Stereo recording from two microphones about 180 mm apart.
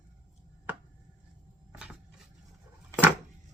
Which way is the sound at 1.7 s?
5° right (ahead or behind).